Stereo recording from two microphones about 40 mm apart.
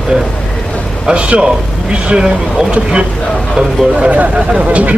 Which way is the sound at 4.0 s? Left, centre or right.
Right.